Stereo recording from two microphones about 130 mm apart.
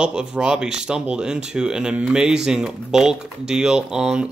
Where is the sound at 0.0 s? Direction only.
5° right (ahead or behind).